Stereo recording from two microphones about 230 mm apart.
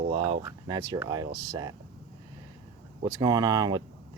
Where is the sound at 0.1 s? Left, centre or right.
Right.